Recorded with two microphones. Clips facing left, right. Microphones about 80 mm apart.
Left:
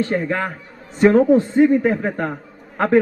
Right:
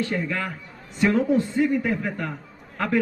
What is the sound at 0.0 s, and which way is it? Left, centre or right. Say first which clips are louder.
A man's voice: left 6 dB; left.